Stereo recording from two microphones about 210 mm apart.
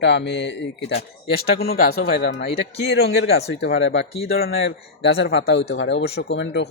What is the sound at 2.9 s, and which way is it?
Speech, 55° left (ahead or behind).